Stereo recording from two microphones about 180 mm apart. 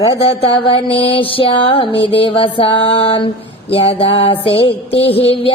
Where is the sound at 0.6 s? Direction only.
30° left (ahead or behind).